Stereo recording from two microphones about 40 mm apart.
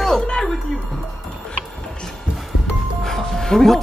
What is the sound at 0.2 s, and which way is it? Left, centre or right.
Music, left.